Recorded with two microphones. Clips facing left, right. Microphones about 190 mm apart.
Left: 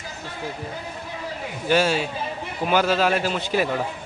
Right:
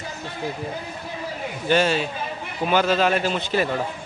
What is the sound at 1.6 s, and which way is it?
A man's voice, 5° left (ahead or behind).